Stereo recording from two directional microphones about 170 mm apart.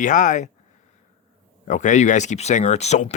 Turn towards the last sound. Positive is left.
turn(degrees=40)  # may be behind; listen again after turning